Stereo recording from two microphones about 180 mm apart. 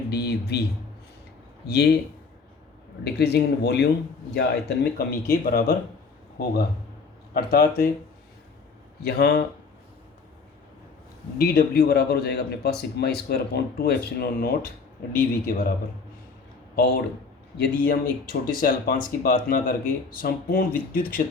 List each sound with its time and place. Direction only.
0.1 s a man's voice: 65° left (ahead or behind)
1.6 s a man's voice: 65° left (ahead or behind)
3.0 s a man's voice: 65° left (ahead or behind)
7.3 s a man's voice: 55° left (ahead or behind)
9.0 s a man's voice: 60° left (ahead or behind)
11.3 s a man's voice: 55° left (ahead or behind)
17.6 s speech: 55° left (ahead or behind)